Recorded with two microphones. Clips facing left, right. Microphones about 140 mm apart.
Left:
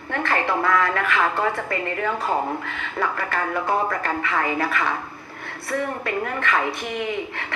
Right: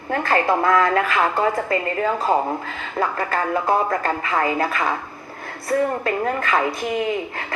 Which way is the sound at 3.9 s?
40° right (ahead or behind).